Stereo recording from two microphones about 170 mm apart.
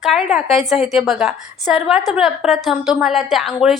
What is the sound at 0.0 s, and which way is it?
A woman's voice, centre (ahead or behind).